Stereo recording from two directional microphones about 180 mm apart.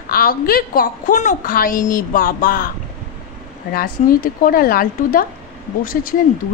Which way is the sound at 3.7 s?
55° left (ahead or behind).